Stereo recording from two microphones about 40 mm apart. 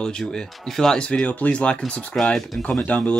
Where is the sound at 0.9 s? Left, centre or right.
Left.